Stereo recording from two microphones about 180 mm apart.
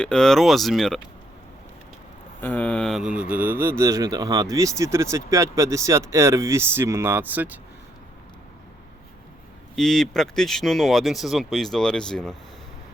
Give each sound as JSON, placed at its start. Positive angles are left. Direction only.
{"t": 0.0, "sound": "speech", "side_deg": 5}
{"t": 2.4, "sound": "speech", "side_deg": 10}
{"t": 9.7, "sound": "speech", "side_deg": 0}